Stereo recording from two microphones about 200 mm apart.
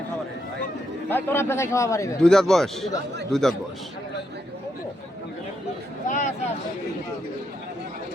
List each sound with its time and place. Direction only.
1.1 s a man's voice: 10° left (ahead or behind)
2.2 s a man's voice: 5° left (ahead or behind)
6.1 s speech: 40° left (ahead or behind)